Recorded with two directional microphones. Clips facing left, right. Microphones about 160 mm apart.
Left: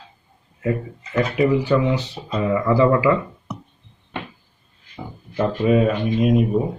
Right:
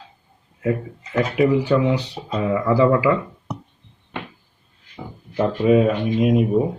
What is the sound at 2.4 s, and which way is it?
Speech, 5° right (ahead or behind).